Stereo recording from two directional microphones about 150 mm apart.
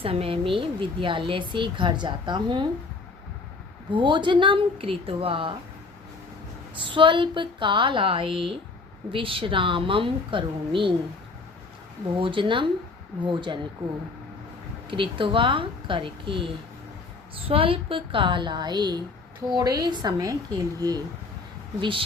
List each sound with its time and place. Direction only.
0.0 s speech: 40° right (ahead or behind)
3.9 s speech: 30° right (ahead or behind)
6.8 s speech: 35° right (ahead or behind)
12.2 s speech: 35° right (ahead or behind)
14.8 s speech: 35° right (ahead or behind)